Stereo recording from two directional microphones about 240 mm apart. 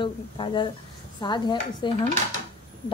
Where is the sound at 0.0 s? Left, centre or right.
Centre.